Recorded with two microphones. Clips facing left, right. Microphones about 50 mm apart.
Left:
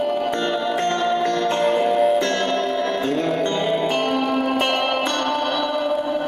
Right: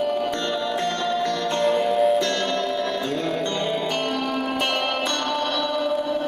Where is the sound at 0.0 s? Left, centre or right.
Centre.